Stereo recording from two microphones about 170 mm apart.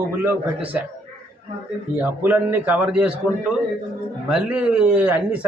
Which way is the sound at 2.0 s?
10° right (ahead or behind).